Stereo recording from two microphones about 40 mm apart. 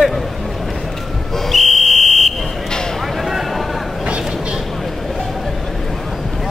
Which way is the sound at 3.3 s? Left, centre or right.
Centre.